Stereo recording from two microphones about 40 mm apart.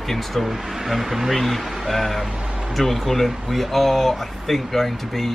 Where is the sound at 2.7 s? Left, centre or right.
Centre.